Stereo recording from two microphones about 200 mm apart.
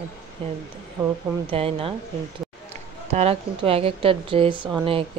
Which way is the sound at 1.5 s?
30° right (ahead or behind).